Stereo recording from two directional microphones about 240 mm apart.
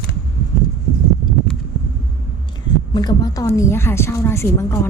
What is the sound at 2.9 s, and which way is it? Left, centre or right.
A woman's voice, centre.